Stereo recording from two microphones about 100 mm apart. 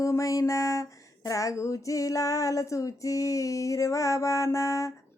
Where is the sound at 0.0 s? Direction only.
30° left (ahead or behind).